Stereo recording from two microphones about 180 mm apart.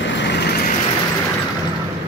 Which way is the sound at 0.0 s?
80° left.